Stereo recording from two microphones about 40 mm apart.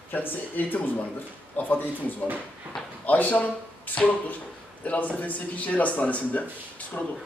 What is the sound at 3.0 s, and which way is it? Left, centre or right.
A man's voice, left.